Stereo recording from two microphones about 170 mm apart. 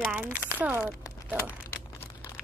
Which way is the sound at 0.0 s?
10° right (ahead or behind).